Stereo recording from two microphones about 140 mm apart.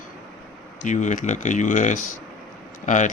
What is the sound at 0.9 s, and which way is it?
Speech, 60° left (ahead or behind).